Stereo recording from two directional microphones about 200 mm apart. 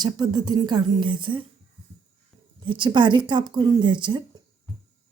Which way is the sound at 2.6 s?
25° right (ahead or behind).